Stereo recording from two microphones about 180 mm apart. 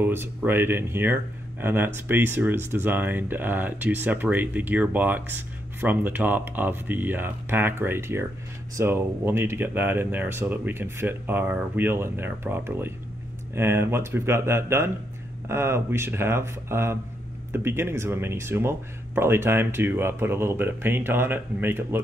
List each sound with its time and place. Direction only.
0.0 s speech: 10° right (ahead or behind)